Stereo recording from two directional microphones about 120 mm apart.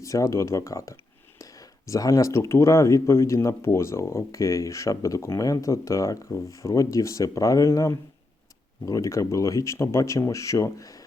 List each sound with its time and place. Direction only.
0.0 s speech: 25° left (ahead or behind)